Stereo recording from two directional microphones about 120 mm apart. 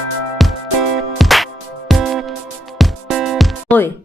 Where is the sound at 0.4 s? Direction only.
Centre (ahead or behind).